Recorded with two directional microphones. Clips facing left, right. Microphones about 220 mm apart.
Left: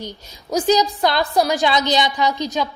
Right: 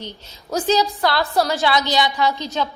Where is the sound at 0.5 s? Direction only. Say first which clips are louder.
Left 2 dB; 15° left (ahead or behind).